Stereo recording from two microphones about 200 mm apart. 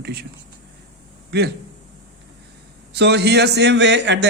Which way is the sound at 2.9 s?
55° right (ahead or behind).